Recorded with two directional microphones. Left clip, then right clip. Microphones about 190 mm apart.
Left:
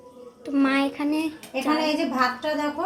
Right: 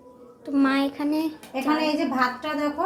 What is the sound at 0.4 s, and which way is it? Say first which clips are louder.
A woman's voice: even; 5° right (ahead or behind).